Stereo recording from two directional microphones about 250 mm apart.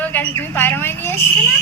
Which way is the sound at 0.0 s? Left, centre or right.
Centre.